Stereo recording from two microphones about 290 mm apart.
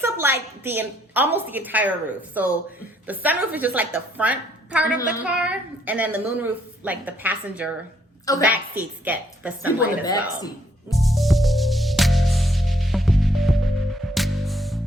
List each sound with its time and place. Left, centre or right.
0.0 s a sound: centre
0.6 s a woman's voice: centre
10.9 s music: centre